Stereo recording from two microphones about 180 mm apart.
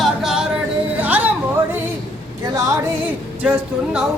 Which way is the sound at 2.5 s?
15° right (ahead or behind).